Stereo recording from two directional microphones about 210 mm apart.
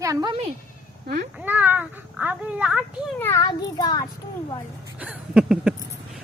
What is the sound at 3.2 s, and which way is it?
Speech, 15° left (ahead or behind).